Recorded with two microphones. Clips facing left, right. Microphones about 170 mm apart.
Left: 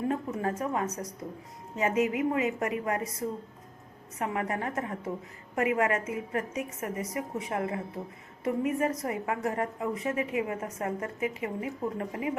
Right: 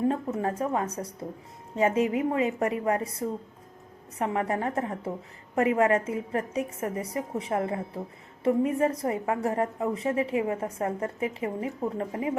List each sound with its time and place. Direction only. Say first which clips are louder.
0.1 s a woman's voice: right 2 dB; 30° right (ahead or behind)